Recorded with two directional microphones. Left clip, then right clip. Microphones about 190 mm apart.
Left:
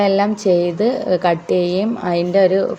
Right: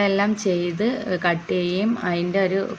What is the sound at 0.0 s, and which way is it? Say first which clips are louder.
A woman's voice: left 5 dB; 10° left (ahead or behind).